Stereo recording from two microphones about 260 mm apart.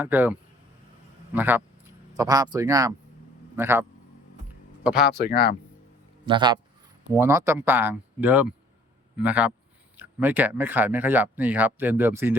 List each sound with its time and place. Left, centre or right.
0.0 s a man's voice: centre
5.0 s speech: left
6.2 s a man's voice: centre